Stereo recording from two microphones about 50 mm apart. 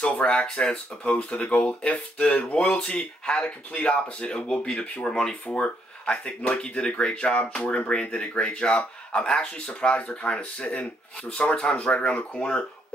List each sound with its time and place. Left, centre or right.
0.0 s speech: centre
7.6 s speech: left
7.9 s speech: centre